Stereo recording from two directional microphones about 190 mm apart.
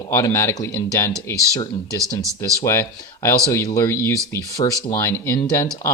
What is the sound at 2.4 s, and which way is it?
Speech, 15° left (ahead or behind).